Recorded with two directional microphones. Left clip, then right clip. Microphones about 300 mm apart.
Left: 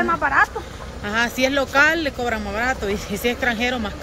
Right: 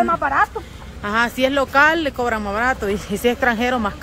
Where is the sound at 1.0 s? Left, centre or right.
Centre.